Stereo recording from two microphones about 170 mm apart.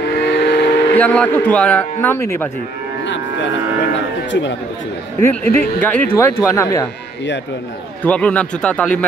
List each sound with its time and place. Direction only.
0.2 s vehicle: 75° left (ahead or behind)
0.9 s a man's voice: 10° left (ahead or behind)
3.1 s a sound: 90° left
4.3 s speech: 90° left
5.2 s a man's voice: 15° left (ahead or behind)
8.0 s a man's voice: 10° left (ahead or behind)